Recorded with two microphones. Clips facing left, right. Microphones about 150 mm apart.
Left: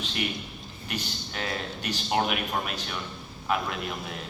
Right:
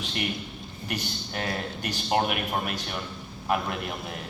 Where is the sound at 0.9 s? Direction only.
50° right (ahead or behind).